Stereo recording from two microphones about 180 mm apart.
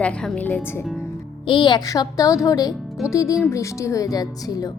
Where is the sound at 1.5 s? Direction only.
25° left (ahead or behind).